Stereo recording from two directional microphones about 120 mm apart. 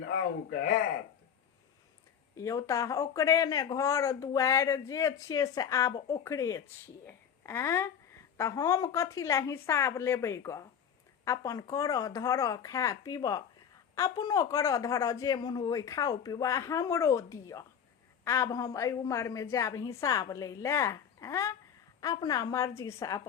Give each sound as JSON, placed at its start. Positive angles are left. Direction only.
{"t": 2.3, "sound": "a woman's voice", "side_deg": 25}